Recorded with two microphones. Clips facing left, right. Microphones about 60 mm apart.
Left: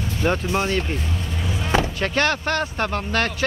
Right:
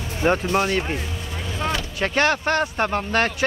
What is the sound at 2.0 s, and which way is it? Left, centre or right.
Speech, centre.